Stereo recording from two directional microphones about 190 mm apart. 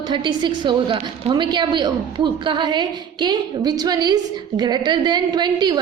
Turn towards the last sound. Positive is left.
turn(degrees=-20)  # may be behind; listen again after turning